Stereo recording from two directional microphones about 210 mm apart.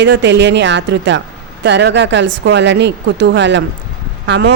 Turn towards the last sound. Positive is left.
turn(degrees=-55)  # may be behind; listen again after turning